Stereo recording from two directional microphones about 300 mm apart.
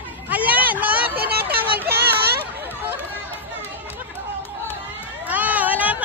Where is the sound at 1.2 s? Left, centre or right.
Right.